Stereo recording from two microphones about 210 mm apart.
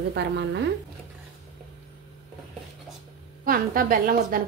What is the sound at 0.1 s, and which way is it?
Speech, 55° right (ahead or behind).